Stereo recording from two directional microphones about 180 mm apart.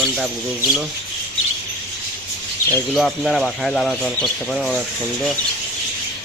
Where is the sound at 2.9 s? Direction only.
Centre (ahead or behind).